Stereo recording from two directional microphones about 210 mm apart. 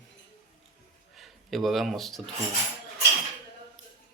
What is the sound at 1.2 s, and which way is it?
Speech, centre (ahead or behind).